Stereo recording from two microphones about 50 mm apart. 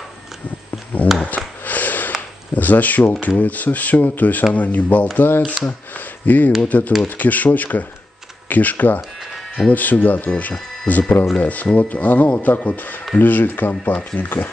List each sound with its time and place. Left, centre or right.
1.2 s snort: left
2.5 s speech: left
5.7 s a sound: left
6.6 s speech: left